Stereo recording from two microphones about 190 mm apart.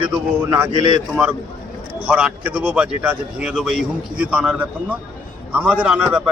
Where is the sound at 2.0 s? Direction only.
5° right (ahead or behind).